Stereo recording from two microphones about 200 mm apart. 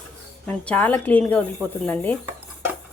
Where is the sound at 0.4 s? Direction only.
5° left (ahead or behind).